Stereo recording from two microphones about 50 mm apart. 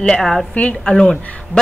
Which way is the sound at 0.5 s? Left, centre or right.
Left.